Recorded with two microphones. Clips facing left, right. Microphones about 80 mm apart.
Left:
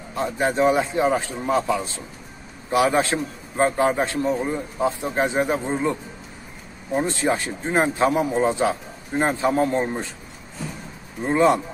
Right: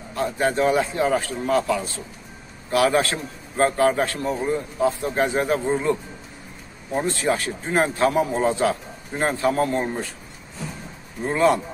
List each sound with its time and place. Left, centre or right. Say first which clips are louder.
0.1 s a man's voice: even; left
7.1 s a man's voice: even; left
11.2 s a man's voice: left 1 dB; left